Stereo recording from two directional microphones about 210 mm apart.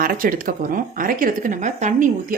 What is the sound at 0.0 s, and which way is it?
Speech, 40° right (ahead or behind).